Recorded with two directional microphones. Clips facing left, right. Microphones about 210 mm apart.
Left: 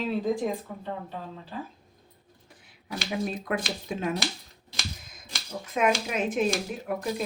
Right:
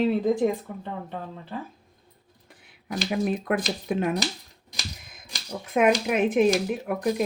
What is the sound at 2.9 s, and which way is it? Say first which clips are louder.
Speech: right 5 dB; 55° right (ahead or behind).